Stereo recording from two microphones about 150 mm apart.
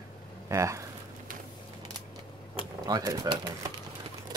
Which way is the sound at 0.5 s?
20° right (ahead or behind).